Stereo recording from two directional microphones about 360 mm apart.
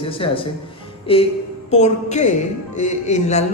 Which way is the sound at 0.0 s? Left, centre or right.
Centre.